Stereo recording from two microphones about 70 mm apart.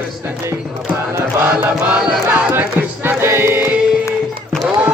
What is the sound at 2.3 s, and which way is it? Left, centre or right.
Music, right.